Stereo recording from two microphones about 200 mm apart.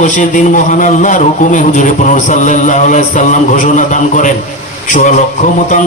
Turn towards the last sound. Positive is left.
turn(degrees=40)  # may be behind; listen again after turning